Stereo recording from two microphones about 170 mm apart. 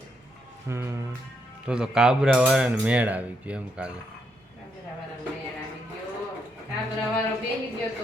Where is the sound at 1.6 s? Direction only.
5° right (ahead or behind).